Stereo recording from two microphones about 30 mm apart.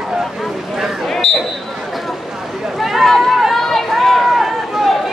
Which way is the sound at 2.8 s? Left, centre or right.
Centre.